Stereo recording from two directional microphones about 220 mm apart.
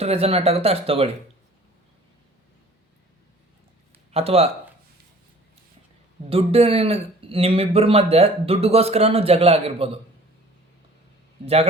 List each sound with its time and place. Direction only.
0.0 s speech: 25° right (ahead or behind)
4.1 s speech: 25° right (ahead or behind)
6.3 s speech: 25° right (ahead or behind)
11.4 s speech: 30° right (ahead or behind)